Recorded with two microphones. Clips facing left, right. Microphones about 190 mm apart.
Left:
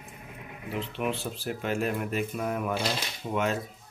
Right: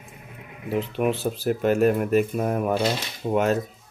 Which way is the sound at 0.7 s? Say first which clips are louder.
Right 7 dB; 45° right (ahead or behind).